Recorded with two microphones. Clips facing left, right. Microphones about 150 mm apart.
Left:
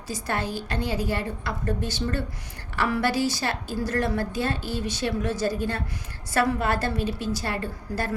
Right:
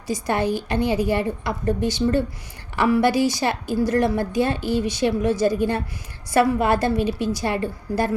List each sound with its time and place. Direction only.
0.1 s a woman's voice: 15° right (ahead or behind)